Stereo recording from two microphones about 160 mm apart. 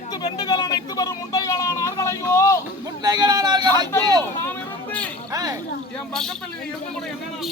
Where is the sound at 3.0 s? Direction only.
25° right (ahead or behind).